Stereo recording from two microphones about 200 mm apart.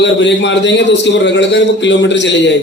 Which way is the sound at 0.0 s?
60° left (ahead or behind).